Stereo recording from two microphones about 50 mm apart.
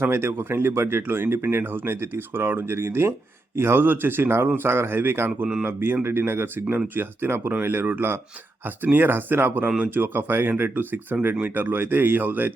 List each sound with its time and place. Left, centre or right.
0.0 s speech: right
2.7 s speech: right